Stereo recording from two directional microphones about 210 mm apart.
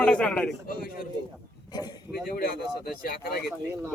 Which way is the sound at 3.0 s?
45° left (ahead or behind).